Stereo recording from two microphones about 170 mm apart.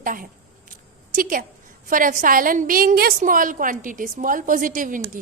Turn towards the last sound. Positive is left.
turn(degrees=-50)  # may be behind; listen again after turning